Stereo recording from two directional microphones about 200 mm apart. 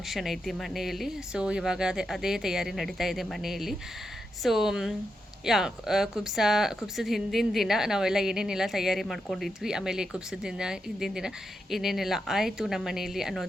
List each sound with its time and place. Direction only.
0.1 s speech: centre (ahead or behind)